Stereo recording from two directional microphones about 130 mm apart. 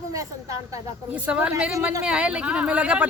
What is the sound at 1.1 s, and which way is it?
A woman's voice, 10° right (ahead or behind).